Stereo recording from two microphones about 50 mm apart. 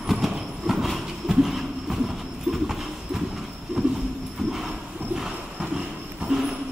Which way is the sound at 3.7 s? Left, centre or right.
Right.